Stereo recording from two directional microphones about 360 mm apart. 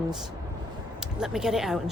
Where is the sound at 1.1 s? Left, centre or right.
Centre.